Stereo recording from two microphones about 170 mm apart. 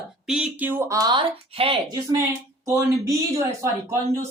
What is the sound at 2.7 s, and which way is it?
Speech, 20° right (ahead or behind).